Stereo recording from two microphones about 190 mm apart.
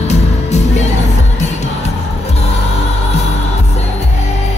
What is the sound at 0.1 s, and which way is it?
Music, 35° left (ahead or behind).